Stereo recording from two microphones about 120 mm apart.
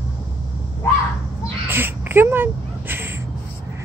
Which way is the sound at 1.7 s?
15° right (ahead or behind).